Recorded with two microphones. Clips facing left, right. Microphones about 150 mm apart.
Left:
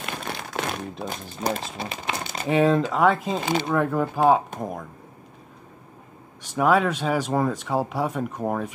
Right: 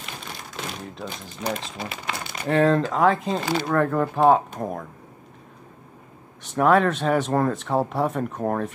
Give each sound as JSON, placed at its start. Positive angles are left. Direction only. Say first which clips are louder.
{"t": 0.0, "sound": "crumpling", "louder": "left 5 dB", "side_deg": 60}
{"t": 1.4, "sound": "speech", "louder": "left 1 dB", "side_deg": 35}
{"t": 2.4, "sound": "speech", "louder": "even", "side_deg": 10}
{"t": 3.4, "sound": "speech", "louder": "left 2 dB", "side_deg": 20}
{"t": 3.7, "sound": "speech", "louder": "right 3 dB", "side_deg": 5}
{"t": 6.4, "sound": "speech", "louder": "right 2 dB", "side_deg": 5}